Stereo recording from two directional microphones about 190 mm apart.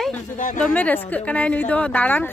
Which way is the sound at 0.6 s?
10° left (ahead or behind).